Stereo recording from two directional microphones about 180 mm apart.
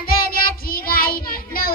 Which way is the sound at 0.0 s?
55° left (ahead or behind).